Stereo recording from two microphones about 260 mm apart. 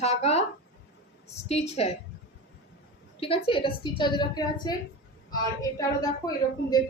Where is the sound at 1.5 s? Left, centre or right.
Left.